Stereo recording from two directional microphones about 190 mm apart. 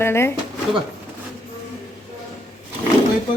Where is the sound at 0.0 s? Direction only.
15° left (ahead or behind).